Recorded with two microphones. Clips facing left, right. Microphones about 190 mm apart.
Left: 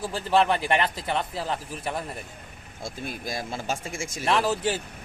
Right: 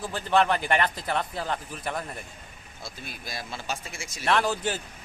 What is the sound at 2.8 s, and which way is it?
Speech, 50° left (ahead or behind).